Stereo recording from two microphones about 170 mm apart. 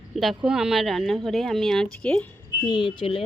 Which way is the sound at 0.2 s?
Centre (ahead or behind).